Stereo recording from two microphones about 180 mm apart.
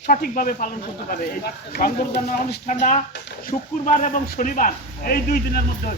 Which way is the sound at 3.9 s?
45° left (ahead or behind).